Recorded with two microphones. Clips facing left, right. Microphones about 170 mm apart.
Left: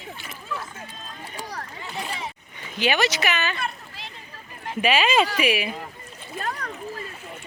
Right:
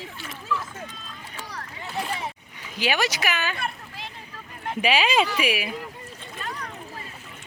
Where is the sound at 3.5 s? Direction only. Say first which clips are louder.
Left 1 dB; 55° right (ahead or behind).